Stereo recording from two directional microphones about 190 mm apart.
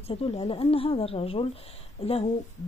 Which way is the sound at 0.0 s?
30° left (ahead or behind).